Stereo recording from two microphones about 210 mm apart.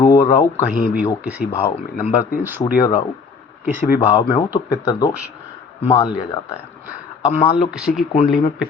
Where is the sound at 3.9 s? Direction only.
20° left (ahead or behind).